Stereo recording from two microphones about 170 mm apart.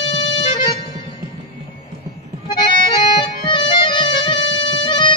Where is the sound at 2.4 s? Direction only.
30° left (ahead or behind).